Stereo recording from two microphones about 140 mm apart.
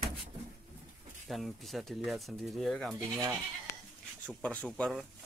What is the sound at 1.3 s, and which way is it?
Speech, centre (ahead or behind).